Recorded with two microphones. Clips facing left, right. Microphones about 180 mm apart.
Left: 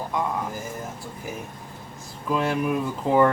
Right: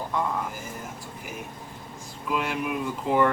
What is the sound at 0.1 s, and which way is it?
Speech, 10° left (ahead or behind).